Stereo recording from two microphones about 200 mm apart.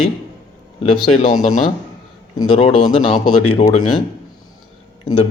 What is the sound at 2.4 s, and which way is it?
Speech, 25° left (ahead or behind).